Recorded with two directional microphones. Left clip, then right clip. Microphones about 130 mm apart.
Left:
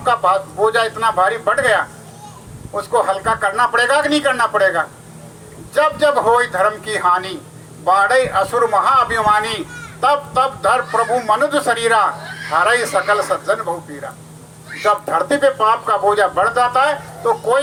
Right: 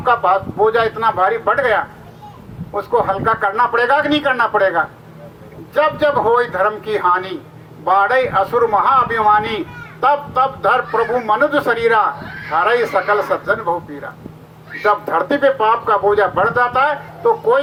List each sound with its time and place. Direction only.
0.0 s speech: 25° right (ahead or behind)
14.8 s speech: 25° right (ahead or behind)